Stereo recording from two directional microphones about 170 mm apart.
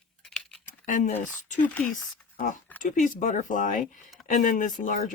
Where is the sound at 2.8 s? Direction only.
50° left (ahead or behind).